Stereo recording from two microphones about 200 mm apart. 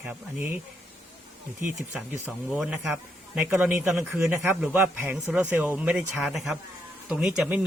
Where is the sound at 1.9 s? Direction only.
5° right (ahead or behind).